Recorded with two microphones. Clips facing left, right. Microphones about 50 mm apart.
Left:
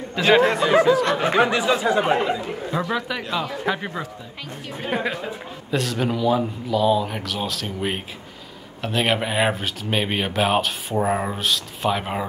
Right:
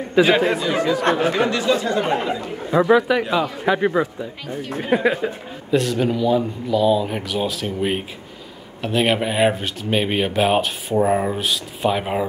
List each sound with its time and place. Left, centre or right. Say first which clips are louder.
0.3 s speech: left 1 dB; centre
0.7 s speech: left 2 dB; left; by 2.4 s centre
2.7 s speech: right 11 dB; centre
3.9 s speech: right 10 dB; centre
4.6 s speech: right 6 dB; centre